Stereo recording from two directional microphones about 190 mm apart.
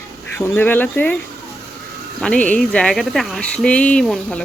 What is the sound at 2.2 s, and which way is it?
Speech, 5° left (ahead or behind).